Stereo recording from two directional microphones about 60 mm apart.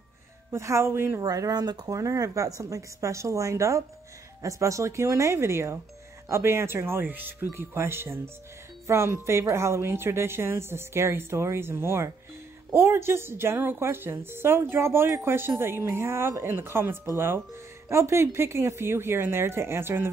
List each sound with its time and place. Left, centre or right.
0.5 s a woman's voice: right
1.2 s a woman's voice: right